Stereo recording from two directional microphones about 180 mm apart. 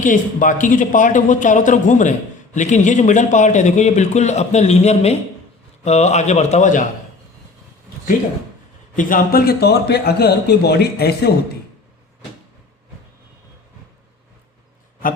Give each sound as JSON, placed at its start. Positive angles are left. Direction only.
{"t": 0.0, "sound": "a man's voice", "side_deg": 45}
{"t": 9.0, "sound": "speech", "side_deg": 50}